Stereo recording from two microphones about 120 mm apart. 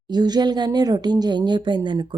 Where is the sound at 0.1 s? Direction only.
35° right (ahead or behind).